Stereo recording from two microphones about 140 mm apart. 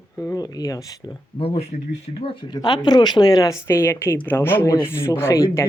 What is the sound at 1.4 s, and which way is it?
A woman's voice, 45° left (ahead or behind).